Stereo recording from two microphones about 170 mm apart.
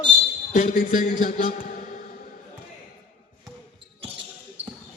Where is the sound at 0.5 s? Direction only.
50° left (ahead or behind).